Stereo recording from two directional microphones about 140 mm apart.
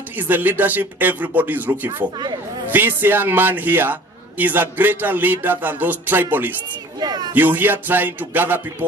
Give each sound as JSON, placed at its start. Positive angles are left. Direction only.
{"t": 0.2, "sound": "a man's voice", "side_deg": -15}
{"t": 7.0, "sound": "a sound", "side_deg": -30}
{"t": 7.3, "sound": "a man's voice", "side_deg": -15}